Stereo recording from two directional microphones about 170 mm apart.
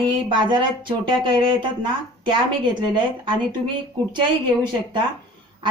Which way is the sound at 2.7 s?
30° right (ahead or behind).